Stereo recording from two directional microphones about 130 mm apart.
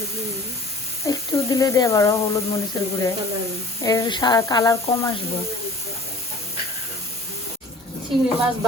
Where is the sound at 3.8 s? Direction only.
30° left (ahead or behind).